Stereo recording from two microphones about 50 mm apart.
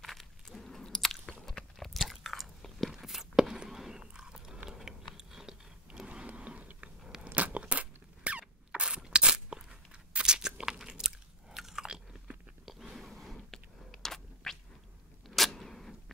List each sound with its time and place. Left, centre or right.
0.0 s biting: centre
2.0 s biting: centre
4.0 s walk: centre
4.6 s a sound: centre
5.1 s biting: centre
5.9 s power windows: centre
6.2 s a sound: right
7.2 s crunch: right; by 11.1 s centre
11.5 s biting: centre
12.6 s a sound: centre